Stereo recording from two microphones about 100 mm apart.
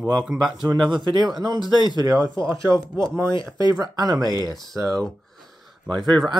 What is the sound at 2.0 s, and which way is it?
Speech, 35° right (ahead or behind).